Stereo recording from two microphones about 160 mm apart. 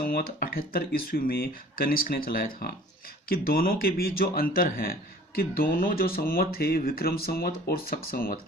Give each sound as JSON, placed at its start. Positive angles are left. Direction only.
{"t": 0.0, "sound": "a man's voice", "side_deg": 70}